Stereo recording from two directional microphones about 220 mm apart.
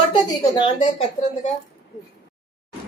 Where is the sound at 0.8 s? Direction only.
35° left (ahead or behind).